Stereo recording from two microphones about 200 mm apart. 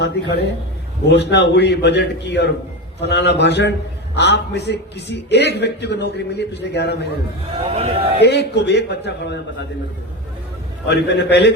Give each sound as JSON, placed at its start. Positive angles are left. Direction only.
{"t": 0.0, "sound": "a man's voice", "side_deg": 55}
{"t": 7.8, "sound": "a man's voice", "side_deg": -30}
{"t": 8.2, "sound": "a man's voice", "side_deg": 55}
{"t": 10.8, "sound": "a man's voice", "side_deg": 60}